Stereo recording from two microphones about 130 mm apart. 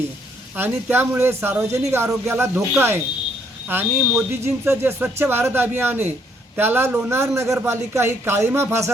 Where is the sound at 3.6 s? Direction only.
15° right (ahead or behind).